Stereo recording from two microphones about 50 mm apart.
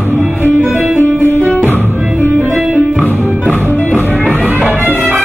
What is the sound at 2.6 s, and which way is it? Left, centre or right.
Music, right.